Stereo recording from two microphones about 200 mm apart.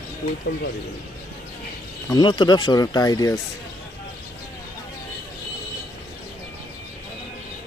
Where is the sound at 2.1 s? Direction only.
20° left (ahead or behind).